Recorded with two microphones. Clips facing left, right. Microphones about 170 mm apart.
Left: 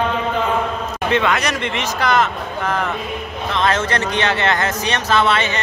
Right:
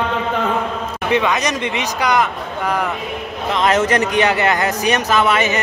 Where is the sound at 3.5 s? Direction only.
15° right (ahead or behind).